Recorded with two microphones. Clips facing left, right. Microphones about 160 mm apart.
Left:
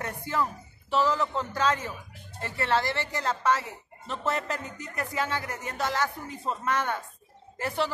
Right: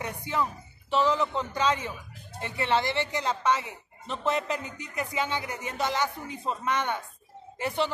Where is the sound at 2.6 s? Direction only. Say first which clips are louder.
Right 1 dB; centre (ahead or behind).